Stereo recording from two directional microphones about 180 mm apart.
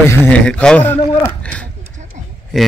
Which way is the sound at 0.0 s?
15° left (ahead or behind).